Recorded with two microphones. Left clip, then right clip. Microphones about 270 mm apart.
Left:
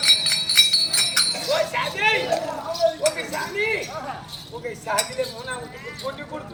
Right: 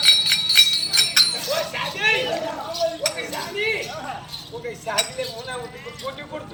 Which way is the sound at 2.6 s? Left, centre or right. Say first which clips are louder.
Left 4 dB; centre.